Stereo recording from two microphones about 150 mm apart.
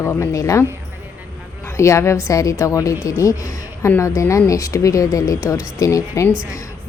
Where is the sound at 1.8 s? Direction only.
20° left (ahead or behind).